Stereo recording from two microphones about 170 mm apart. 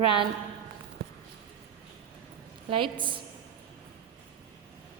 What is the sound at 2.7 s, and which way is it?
Speech, 30° right (ahead or behind).